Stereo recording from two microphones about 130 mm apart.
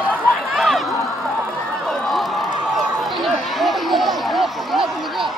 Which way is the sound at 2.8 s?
Centre (ahead or behind).